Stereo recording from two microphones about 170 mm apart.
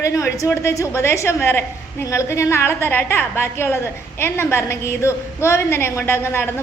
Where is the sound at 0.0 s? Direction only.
20° left (ahead or behind).